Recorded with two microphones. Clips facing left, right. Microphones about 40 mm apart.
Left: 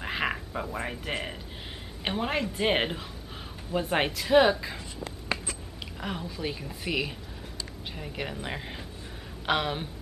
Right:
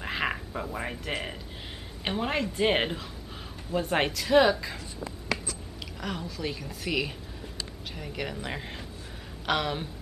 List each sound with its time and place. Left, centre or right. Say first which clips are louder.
0.0 s a sound: even; centre
2.0 s a woman's voice: even; centre
5.9 s a woman's voice: even; centre